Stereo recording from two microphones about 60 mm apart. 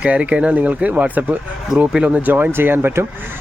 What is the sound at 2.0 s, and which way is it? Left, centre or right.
Speech, right.